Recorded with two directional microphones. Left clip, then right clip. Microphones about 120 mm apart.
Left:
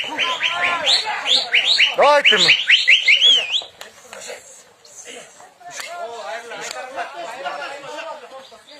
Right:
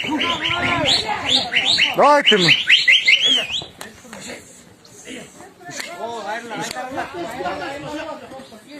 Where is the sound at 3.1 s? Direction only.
40° right (ahead or behind).